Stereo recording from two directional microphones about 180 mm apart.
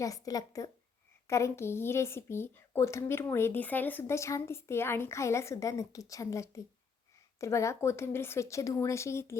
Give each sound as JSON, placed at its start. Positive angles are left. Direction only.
{"t": 0.0, "sound": "speech", "side_deg": 20}